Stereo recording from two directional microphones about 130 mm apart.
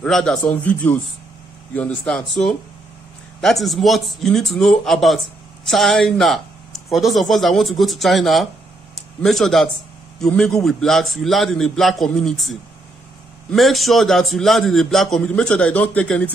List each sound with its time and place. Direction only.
0.0 s a man's voice: 5° left (ahead or behind)